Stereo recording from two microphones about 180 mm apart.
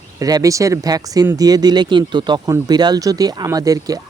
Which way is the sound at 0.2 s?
20° right (ahead or behind).